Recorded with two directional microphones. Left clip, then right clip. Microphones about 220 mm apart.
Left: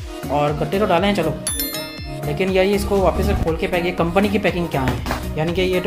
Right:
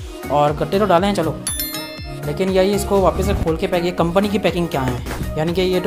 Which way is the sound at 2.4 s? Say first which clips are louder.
Right 1 dB; 30° right (ahead or behind).